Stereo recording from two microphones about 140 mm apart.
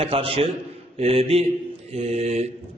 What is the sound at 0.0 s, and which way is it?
A man's voice, 40° right (ahead or behind).